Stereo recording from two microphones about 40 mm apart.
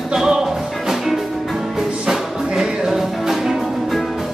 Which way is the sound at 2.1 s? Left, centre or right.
Centre.